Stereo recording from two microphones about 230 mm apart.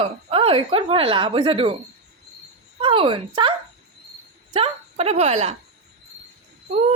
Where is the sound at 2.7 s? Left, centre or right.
Right.